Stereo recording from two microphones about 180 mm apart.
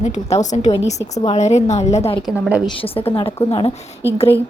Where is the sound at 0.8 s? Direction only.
20° left (ahead or behind).